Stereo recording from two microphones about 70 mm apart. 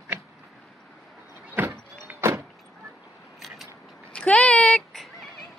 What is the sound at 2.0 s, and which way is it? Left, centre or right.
Vehicle, right.